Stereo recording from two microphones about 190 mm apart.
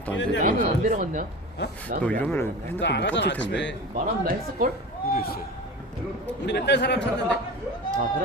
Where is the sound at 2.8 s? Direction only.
65° left (ahead or behind).